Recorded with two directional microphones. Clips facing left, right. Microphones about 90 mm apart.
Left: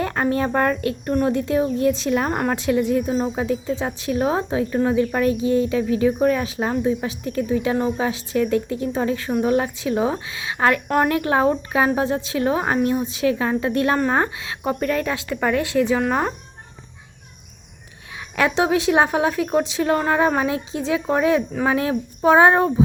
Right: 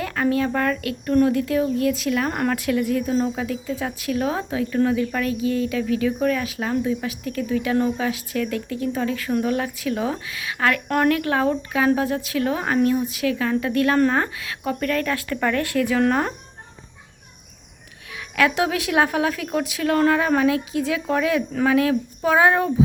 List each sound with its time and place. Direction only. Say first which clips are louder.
0.0 s speech: left 1 dB; 35° left (ahead or behind)
16.0 s speech: right 1 dB; 10° left (ahead or behind)
18.1 s speech: even; 25° left (ahead or behind)